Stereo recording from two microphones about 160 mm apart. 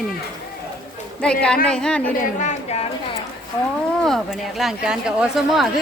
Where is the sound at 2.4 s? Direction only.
45° left (ahead or behind).